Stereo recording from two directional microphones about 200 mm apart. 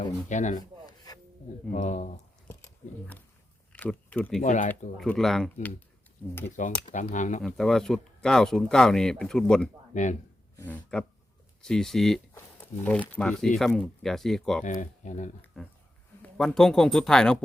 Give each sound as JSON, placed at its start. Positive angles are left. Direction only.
{"t": 0.0, "sound": "speech", "side_deg": 35}
{"t": 0.9, "sound": "rub", "side_deg": 20}
{"t": 1.7, "sound": "speech", "side_deg": 40}
{"t": 3.7, "sound": "speech", "side_deg": 5}
{"t": 4.4, "sound": "speech", "side_deg": 40}
{"t": 4.9, "sound": "speech", "side_deg": 0}
{"t": 6.2, "sound": "a sound", "side_deg": 5}
{"t": 6.8, "sound": "speech", "side_deg": 40}
{"t": 7.4, "sound": "speech", "side_deg": 0}
{"t": 9.9, "sound": "speech", "side_deg": 40}
{"t": 10.6, "sound": "a sound", "side_deg": 10}
{"t": 11.6, "sound": "speech", "side_deg": 0}
{"t": 14.6, "sound": "speech", "side_deg": 40}
{"t": 15.6, "sound": "speech", "side_deg": 0}